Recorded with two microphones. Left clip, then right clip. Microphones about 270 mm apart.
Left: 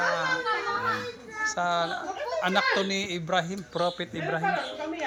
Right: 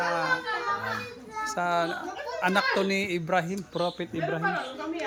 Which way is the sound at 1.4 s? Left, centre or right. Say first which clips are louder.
Even; right.